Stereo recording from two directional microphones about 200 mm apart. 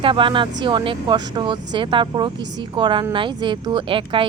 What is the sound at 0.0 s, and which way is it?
Speech, 25° right (ahead or behind).